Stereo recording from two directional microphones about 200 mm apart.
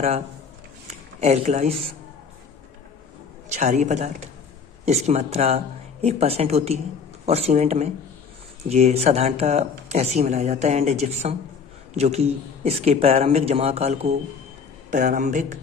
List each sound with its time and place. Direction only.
0.8 s speech: 35° right (ahead or behind)
3.5 s speech: 35° right (ahead or behind)